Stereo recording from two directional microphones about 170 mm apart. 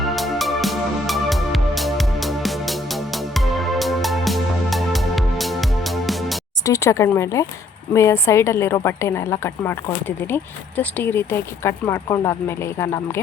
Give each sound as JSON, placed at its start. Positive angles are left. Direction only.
{"t": 0.0, "sound": "music", "side_deg": 0}
{"t": 6.7, "sound": "speech", "side_deg": 15}